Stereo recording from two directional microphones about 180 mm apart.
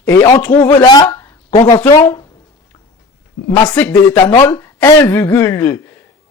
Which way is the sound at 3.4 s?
20° left (ahead or behind).